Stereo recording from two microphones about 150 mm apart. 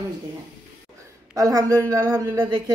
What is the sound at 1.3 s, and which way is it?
Speech, 25° right (ahead or behind).